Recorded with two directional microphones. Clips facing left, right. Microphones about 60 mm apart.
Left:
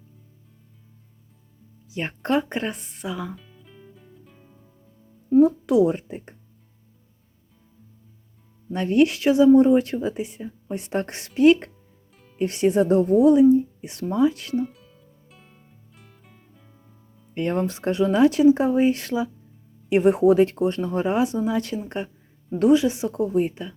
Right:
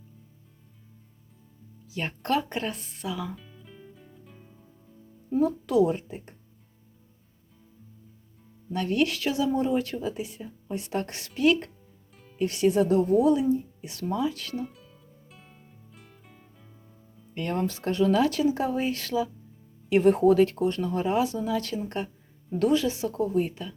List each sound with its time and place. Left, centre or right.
1.9 s speech: left
3.3 s music: centre
5.4 s speech: left
8.7 s speech: left
12.1 s music: centre
12.4 s speech: left
14.7 s music: centre
17.3 s speech: left